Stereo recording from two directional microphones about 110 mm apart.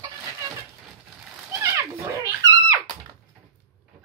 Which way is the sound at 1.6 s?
30° right (ahead or behind).